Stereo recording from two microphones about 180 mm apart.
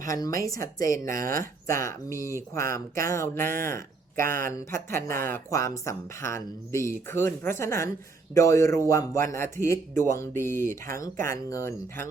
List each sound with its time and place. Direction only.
0.1 s a woman's voice: 20° left (ahead or behind)
1.1 s speech: 50° right (ahead or behind)
1.6 s speech: 15° left (ahead or behind)